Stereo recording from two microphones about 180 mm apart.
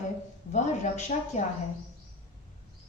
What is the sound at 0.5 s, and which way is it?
Speech, 40° left (ahead or behind).